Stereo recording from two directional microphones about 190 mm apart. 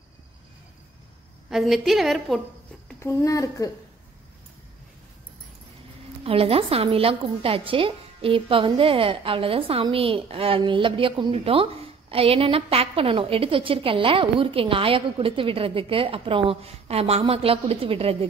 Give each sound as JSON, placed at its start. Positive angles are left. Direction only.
{"t": 1.5, "sound": "a woman's voice", "side_deg": 0}
{"t": 3.0, "sound": "speech", "side_deg": 15}
{"t": 6.2, "sound": "a woman's voice", "side_deg": -30}